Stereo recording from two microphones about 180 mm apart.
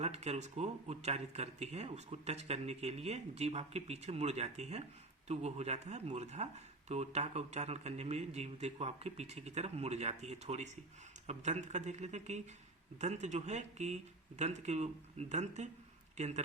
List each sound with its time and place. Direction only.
0.0 s a man's voice: 35° right (ahead or behind)